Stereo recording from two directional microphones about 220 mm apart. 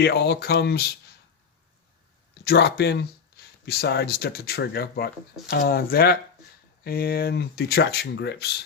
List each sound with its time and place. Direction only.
0.0 s speech: 45° left (ahead or behind)
2.4 s speech: 45° left (ahead or behind)